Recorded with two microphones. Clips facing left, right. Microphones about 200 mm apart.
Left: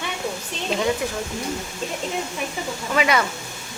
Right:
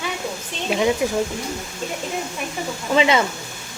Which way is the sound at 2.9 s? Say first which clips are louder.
Right 3 dB; 25° right (ahead or behind).